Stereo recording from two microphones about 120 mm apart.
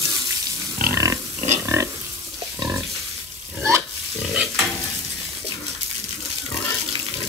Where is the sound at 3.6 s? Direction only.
20° right (ahead or behind).